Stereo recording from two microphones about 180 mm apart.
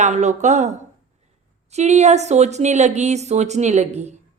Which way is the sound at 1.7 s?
40° right (ahead or behind).